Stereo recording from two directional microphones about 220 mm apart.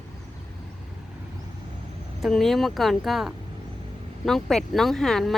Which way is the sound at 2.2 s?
Centre (ahead or behind).